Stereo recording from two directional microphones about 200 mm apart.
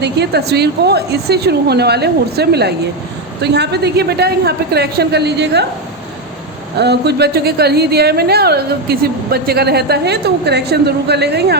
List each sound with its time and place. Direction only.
0.0 s a woman's voice: 55° right (ahead or behind)
6.7 s speech: 55° right (ahead or behind)